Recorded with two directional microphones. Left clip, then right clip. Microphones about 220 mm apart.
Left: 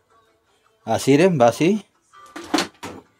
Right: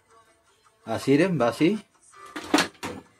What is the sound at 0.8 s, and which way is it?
Speech, 45° left (ahead or behind).